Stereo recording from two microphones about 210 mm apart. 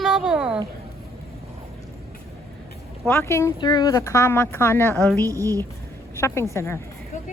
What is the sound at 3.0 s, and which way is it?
Speech, 10° left (ahead or behind).